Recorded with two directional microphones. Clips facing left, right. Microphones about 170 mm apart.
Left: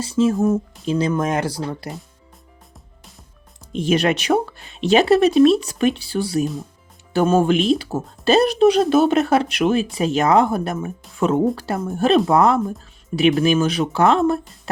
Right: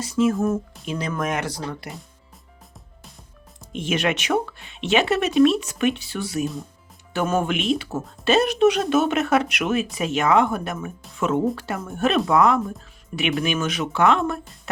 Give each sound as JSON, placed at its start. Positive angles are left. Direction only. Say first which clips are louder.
{"t": 0.0, "sound": "speech", "louder": "left 3 dB", "side_deg": 30}
{"t": 3.7, "sound": "speech", "louder": "left 5 dB", "side_deg": 35}